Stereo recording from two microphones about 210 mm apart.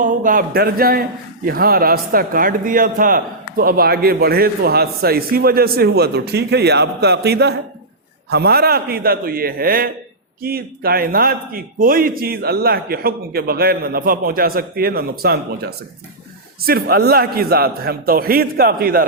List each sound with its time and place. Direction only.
0.0 s a man's voice: 40° right (ahead or behind)